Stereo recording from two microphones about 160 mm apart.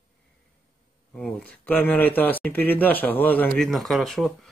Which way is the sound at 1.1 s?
10° left (ahead or behind).